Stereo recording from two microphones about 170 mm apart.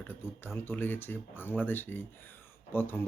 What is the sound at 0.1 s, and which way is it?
A man's voice, 15° left (ahead or behind).